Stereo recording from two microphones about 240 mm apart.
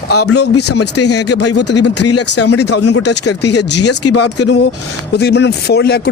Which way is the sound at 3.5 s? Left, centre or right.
Left.